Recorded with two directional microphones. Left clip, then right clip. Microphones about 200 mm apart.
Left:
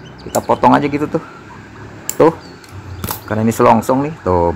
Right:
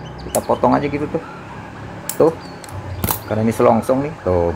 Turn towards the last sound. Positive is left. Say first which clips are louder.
# left 3 dB
turn(degrees=25)  # may be behind; listen again after turning